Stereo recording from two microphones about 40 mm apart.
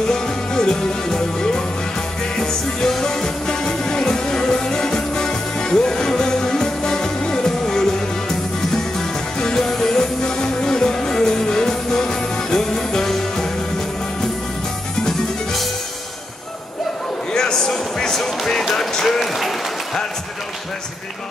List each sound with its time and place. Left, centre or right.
0.0 s music: centre
15.0 s music: centre
17.3 s music: centre